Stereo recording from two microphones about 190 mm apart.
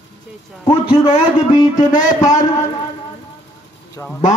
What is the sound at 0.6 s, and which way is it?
Speech, 25° left (ahead or behind).